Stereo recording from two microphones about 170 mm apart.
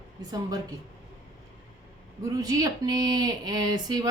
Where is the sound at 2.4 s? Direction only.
20° right (ahead or behind).